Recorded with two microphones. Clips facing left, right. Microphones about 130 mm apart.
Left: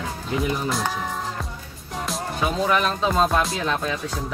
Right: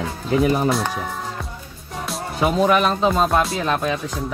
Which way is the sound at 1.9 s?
Centre (ahead or behind).